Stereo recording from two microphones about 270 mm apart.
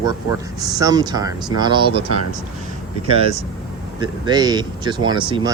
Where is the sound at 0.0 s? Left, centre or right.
Centre.